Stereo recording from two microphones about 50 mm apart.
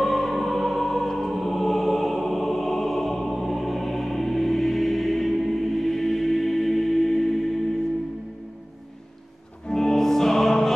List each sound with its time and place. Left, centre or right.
0.0 s music: centre
9.7 s music: centre